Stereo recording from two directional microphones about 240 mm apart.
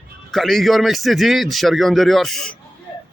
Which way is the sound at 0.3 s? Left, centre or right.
Centre.